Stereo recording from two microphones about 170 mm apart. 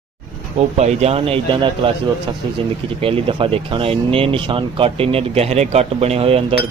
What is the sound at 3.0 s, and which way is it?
Speech, 30° right (ahead or behind).